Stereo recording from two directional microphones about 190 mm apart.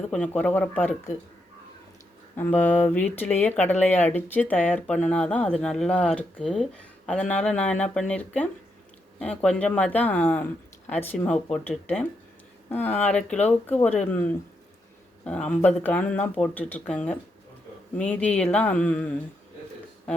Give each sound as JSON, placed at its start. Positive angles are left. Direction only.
{"t": 0.1, "sound": "speech", "side_deg": 5}
{"t": 2.3, "sound": "speech", "side_deg": 10}